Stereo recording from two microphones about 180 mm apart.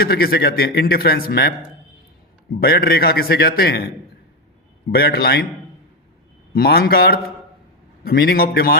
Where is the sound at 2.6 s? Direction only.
60° left (ahead or behind).